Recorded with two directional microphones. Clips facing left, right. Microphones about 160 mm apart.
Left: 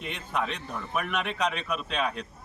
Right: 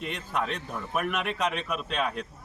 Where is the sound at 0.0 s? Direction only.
Centre (ahead or behind).